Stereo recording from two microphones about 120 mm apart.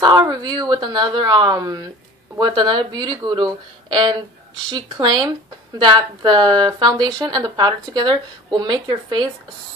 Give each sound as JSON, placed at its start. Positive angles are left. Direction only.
{"t": 0.0, "sound": "speech", "side_deg": -35}